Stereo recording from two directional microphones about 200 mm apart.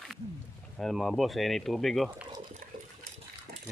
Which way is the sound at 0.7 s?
Centre (ahead or behind).